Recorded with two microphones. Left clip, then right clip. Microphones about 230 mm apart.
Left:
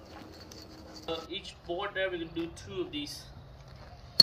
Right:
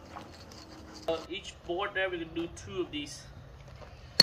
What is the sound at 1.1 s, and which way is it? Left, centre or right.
Speech, centre.